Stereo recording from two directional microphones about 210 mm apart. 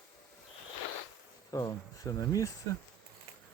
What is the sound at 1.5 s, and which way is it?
Speech, 15° left (ahead or behind).